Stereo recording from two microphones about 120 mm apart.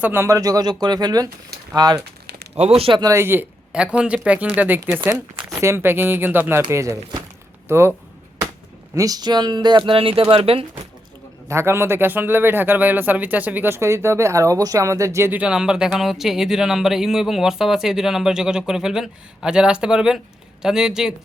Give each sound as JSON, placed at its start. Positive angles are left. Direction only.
{"t": 0.0, "sound": "speech", "side_deg": -20}
{"t": 2.6, "sound": "speech", "side_deg": -55}
{"t": 3.0, "sound": "a man's voice", "side_deg": -25}
{"t": 9.0, "sound": "speech", "side_deg": -30}
{"t": 11.4, "sound": "a man's voice", "side_deg": -20}